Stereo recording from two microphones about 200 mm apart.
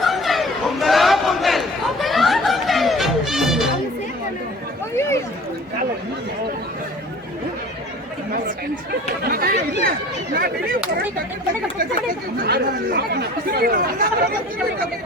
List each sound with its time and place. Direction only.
0.0 s chatter: centre (ahead or behind)
4.9 s a sound: 15° left (ahead or behind)
8.3 s chatter: 45° right (ahead or behind)
10.3 s speech: 50° right (ahead or behind)
12.4 s speech: 50° right (ahead or behind)